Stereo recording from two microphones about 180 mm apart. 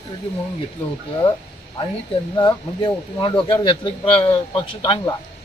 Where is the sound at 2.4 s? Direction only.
25° left (ahead or behind).